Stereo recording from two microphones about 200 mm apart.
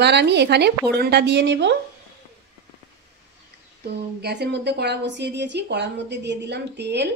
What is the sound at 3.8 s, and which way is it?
A woman's voice, 55° right (ahead or behind).